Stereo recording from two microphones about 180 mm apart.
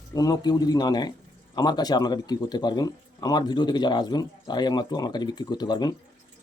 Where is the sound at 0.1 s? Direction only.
20° left (ahead or behind).